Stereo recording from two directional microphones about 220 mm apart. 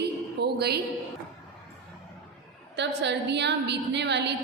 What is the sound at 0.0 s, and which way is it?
Music, 50° right (ahead or behind).